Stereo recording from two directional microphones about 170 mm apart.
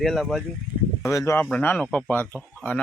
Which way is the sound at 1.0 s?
15° left (ahead or behind).